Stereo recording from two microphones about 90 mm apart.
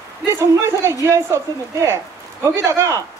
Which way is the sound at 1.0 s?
35° right (ahead or behind).